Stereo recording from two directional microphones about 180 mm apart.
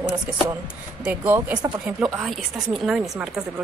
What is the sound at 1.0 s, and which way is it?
A woman's voice, 10° right (ahead or behind).